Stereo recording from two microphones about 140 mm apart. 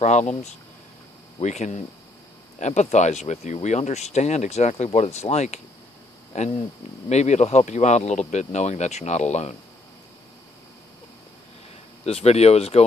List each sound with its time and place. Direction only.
0.0 s speech: 55° left (ahead or behind)
12.0 s speech: 45° left (ahead or behind)